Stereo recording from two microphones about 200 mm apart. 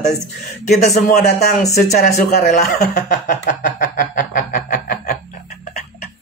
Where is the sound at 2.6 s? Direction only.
45° left (ahead or behind).